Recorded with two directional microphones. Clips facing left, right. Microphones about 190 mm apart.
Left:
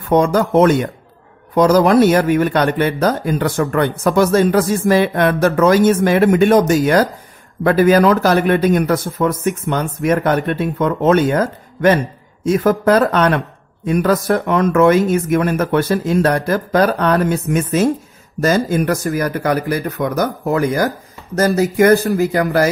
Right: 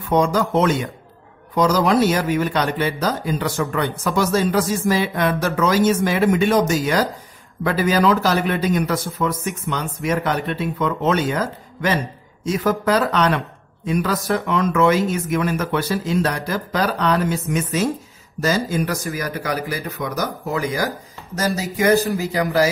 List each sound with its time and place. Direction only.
0.1 s a man's voice: 55° left (ahead or behind)